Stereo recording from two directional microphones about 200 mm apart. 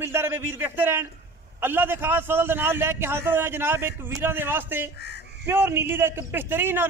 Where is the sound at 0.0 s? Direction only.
15° right (ahead or behind).